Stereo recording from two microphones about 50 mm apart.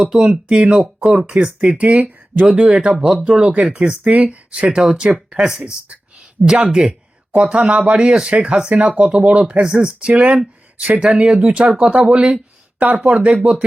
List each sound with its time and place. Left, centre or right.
0.0 s speech: centre